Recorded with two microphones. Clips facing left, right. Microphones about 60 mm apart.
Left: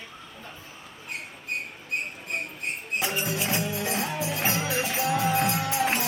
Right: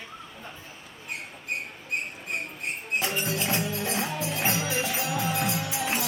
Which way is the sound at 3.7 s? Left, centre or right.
Left.